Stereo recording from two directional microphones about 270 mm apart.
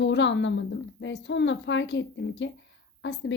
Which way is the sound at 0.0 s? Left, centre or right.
Left.